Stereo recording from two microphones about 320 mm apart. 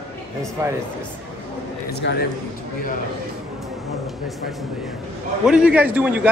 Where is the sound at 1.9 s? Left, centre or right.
Left.